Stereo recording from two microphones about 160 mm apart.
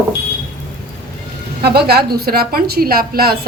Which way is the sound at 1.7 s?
80° right.